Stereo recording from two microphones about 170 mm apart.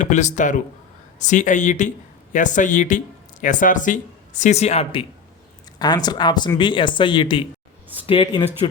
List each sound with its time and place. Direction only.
0.0 s speech: 45° left (ahead or behind)